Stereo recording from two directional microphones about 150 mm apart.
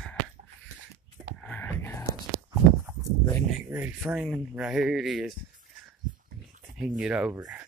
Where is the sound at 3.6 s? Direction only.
10° right (ahead or behind).